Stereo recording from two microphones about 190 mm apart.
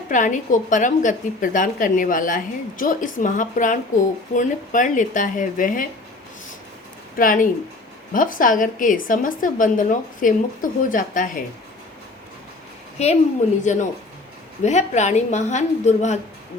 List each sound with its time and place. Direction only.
0.1 s a woman's voice: 40° left (ahead or behind)
7.2 s a woman's voice: 45° left (ahead or behind)
13.0 s a woman's voice: 35° left (ahead or behind)